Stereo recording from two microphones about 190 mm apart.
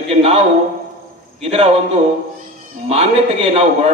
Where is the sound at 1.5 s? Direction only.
30° right (ahead or behind).